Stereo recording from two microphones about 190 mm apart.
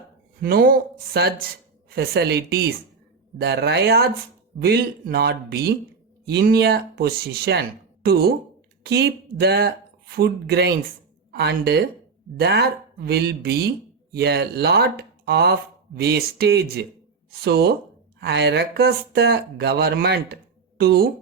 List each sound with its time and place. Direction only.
0.4 s speech: 50° right (ahead or behind)
8.8 s speech: 60° right (ahead or behind)